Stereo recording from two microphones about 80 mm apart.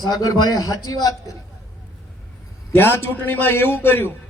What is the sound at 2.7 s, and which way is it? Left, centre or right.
A man's voice, left.